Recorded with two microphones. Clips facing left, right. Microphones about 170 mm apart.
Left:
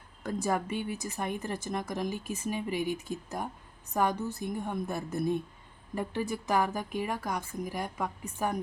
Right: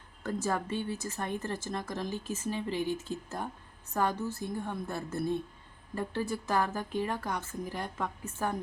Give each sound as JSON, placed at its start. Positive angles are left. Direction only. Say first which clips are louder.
{"t": 0.2, "sound": "speech", "louder": "left 2 dB", "side_deg": 15}